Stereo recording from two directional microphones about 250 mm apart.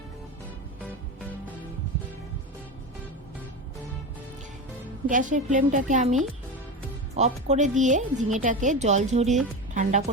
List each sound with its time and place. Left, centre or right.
5.0 s a woman's voice: right